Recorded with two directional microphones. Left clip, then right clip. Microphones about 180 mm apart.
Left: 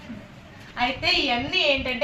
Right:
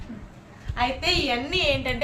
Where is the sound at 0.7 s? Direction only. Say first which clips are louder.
Left 1 dB; 15° right (ahead or behind).